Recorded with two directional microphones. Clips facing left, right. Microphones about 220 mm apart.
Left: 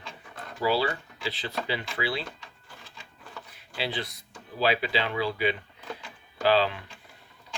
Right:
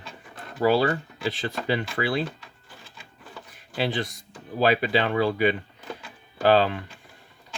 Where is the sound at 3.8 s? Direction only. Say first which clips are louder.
Right 6 dB; 45° right (ahead or behind).